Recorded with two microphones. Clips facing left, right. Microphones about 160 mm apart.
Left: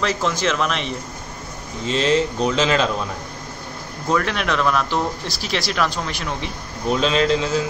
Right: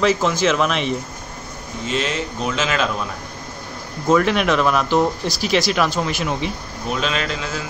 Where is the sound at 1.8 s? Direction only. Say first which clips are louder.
Left 5 dB; 30° left (ahead or behind).